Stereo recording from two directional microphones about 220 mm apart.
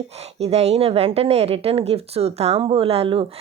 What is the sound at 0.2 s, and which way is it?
A woman's voice, 30° right (ahead or behind).